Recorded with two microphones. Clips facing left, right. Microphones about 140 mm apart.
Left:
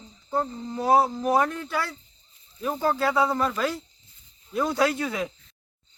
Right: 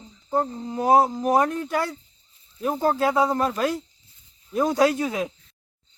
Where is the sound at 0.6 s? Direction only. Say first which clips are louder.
Right 2 dB; 20° right (ahead or behind).